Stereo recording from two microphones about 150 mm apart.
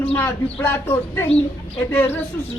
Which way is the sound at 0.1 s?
10° left (ahead or behind).